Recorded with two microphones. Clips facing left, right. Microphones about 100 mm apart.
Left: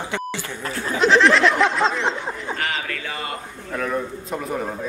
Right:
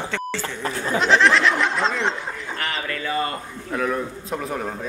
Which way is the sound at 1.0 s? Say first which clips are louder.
Left 2 dB; centre (ahead or behind).